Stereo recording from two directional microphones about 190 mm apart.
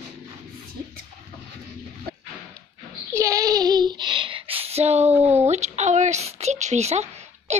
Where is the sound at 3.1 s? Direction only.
15° right (ahead or behind).